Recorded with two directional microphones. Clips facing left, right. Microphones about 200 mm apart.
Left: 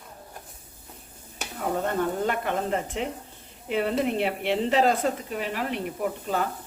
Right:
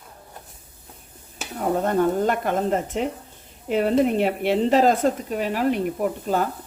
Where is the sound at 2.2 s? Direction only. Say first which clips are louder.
Right 5 dB; 45° right (ahead or behind).